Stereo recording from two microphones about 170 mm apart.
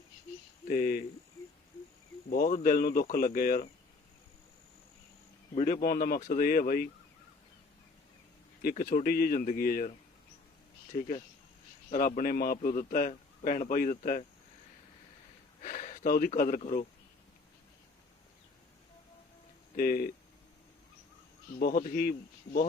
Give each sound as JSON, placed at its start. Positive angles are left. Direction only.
{"t": 0.7, "sound": "speech", "side_deg": 60}
{"t": 2.3, "sound": "a man's voice", "side_deg": 60}
{"t": 5.5, "sound": "a man's voice", "side_deg": 50}
{"t": 8.7, "sound": "a man's voice", "side_deg": 50}
{"t": 11.9, "sound": "a man's voice", "side_deg": 60}
{"t": 15.6, "sound": "speech", "side_deg": 50}
{"t": 19.7, "sound": "a man's voice", "side_deg": 60}
{"t": 21.6, "sound": "a man's voice", "side_deg": 55}